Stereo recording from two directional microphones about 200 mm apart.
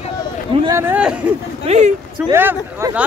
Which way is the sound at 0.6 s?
15° right (ahead or behind).